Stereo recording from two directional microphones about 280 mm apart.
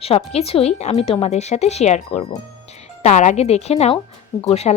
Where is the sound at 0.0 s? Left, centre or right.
Left.